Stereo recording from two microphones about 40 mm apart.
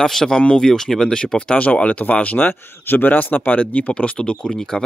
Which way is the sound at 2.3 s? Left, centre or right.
Left.